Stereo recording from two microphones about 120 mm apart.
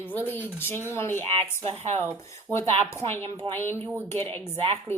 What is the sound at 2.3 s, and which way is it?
A woman's voice, 25° left (ahead or behind).